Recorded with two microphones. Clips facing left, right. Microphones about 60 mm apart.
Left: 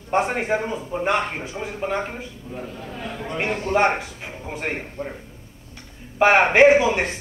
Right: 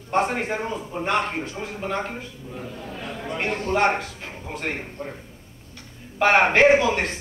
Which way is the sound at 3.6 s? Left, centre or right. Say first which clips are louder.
Left 2 dB; centre.